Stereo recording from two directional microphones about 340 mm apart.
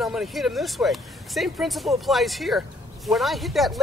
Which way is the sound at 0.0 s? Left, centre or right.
Centre.